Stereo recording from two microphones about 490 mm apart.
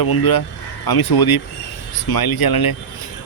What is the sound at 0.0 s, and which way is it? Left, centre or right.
Speech, left.